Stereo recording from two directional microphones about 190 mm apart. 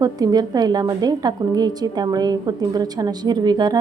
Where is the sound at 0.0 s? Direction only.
20° right (ahead or behind).